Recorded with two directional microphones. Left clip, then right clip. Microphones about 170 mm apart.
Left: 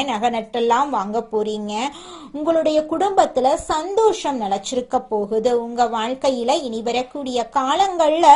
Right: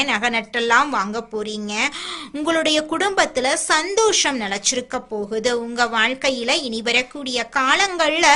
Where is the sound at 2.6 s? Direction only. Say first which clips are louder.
Left 1 dB; 5° left (ahead or behind).